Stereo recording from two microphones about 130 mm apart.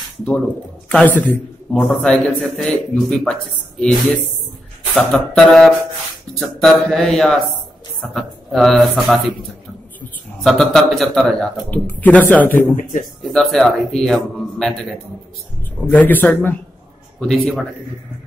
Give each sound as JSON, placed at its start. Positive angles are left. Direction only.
{"t": 0.8, "sound": "a man's voice", "side_deg": 10}
{"t": 4.9, "sound": "a man's voice", "side_deg": 5}
{"t": 10.4, "sound": "a man's voice", "side_deg": 0}
{"t": 12.5, "sound": "speech", "side_deg": 90}
{"t": 13.3, "sound": "a man's voice", "side_deg": 0}
{"t": 17.2, "sound": "a man's voice", "side_deg": 5}